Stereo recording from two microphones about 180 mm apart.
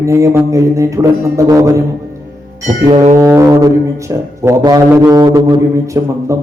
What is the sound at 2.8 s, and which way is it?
Music, 30° right (ahead or behind).